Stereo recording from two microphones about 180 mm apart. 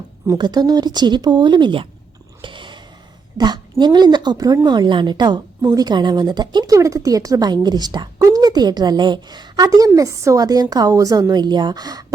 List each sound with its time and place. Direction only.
0.3 s a woman's voice: 25° right (ahead or behind)
2.4 s a sound: 25° right (ahead or behind)
3.3 s a woman's voice: 25° right (ahead or behind)